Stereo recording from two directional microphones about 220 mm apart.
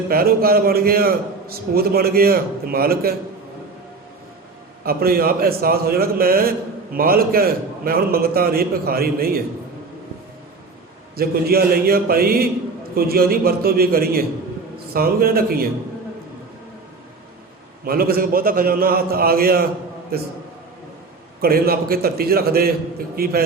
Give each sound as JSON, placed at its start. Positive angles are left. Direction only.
{"t": 0.1, "sound": "a man's voice", "side_deg": -45}
{"t": 4.8, "sound": "a man's voice", "side_deg": -45}
{"t": 11.2, "sound": "a man's voice", "side_deg": -45}
{"t": 17.8, "sound": "a man's voice", "side_deg": -45}
{"t": 21.4, "sound": "a man's voice", "side_deg": -45}